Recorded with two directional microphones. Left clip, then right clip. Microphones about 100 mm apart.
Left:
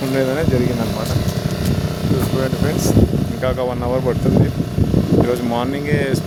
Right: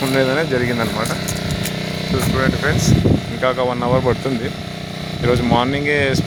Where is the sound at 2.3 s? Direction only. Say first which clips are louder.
Right 2 dB; 20° left (ahead or behind); by 4.1 s centre (ahead or behind).